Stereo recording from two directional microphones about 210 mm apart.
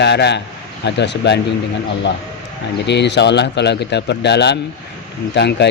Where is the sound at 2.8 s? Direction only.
55° left (ahead or behind).